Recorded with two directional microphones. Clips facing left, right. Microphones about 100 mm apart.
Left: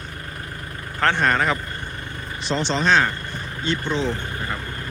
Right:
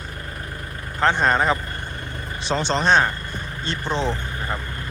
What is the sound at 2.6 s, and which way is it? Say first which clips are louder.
Speech: right 1 dB; 45° right (ahead or behind).